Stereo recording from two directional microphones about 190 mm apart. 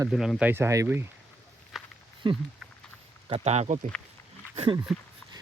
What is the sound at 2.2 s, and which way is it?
Speech, 25° right (ahead or behind).